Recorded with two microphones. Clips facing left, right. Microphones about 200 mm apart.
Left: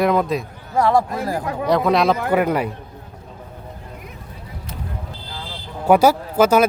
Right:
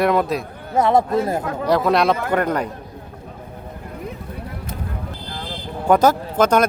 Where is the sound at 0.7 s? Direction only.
20° right (ahead or behind).